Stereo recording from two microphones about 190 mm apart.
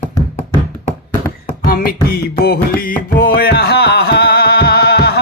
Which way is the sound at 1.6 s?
50° left (ahead or behind).